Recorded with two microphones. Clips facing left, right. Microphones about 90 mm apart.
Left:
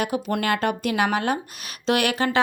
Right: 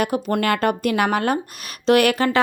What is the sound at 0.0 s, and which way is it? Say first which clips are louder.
A woman's voice: right 4 dB; 45° right (ahead or behind).